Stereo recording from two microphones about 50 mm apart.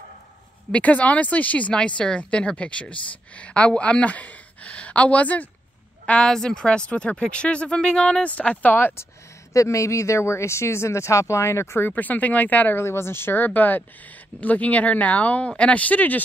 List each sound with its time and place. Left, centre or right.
0.7 s speech: left
6.2 s speech: centre
8.4 s speech: left
9.5 s speech: left
11.9 s speech: left
12.7 s speech: left
13.5 s speech: left